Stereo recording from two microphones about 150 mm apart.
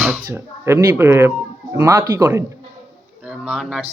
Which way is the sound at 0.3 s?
15° right (ahead or behind).